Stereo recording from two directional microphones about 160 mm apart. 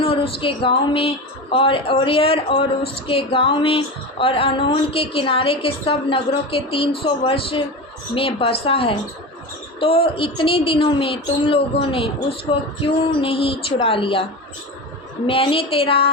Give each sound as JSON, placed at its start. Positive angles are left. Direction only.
{"t": 0.0, "sound": "speech", "side_deg": 35}
{"t": 15.3, "sound": "speech", "side_deg": 35}